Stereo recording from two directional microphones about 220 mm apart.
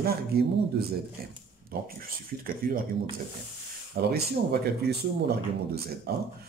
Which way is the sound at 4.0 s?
45° right (ahead or behind).